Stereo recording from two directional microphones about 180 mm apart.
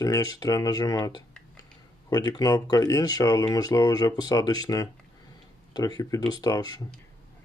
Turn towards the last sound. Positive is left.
turn(degrees=20)  # may be behind; listen again after turning